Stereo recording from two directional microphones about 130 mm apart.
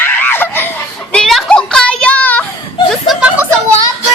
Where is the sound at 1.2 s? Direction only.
5° left (ahead or behind).